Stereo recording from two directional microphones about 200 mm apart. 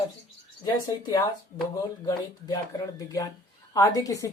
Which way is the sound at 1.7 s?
15° left (ahead or behind).